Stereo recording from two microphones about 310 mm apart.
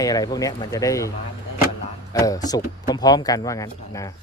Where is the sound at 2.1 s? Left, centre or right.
Centre.